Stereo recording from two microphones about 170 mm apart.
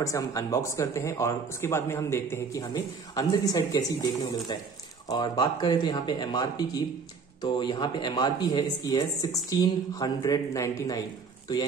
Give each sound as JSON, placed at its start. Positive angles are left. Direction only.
{"t": 0.0, "sound": "speech", "side_deg": 20}
{"t": 5.0, "sound": "speech", "side_deg": 25}